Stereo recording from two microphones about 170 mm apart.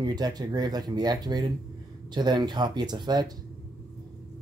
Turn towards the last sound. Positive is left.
turn(degrees=-25)  # may be behind; listen again after turning